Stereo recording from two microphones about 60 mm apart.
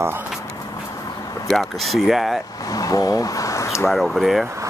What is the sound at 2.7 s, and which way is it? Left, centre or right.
Speech, left.